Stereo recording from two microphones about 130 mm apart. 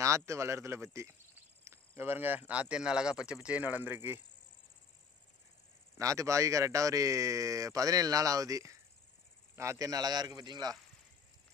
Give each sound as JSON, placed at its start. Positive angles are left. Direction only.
{"t": 0.0, "sound": "a man's voice", "side_deg": -25}
{"t": 5.9, "sound": "a man's voice", "side_deg": -25}